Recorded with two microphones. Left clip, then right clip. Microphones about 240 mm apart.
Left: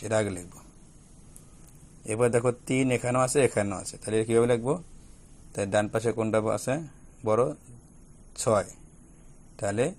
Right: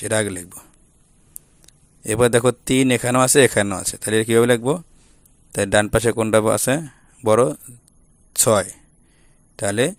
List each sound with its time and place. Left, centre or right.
0.0 s a man's voice: right
1.6 s a man's voice: right